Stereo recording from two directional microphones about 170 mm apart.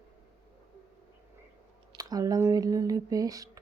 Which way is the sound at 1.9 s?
20° right (ahead or behind).